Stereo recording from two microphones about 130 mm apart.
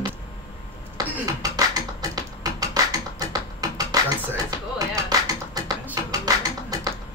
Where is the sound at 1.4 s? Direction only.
30° right (ahead or behind).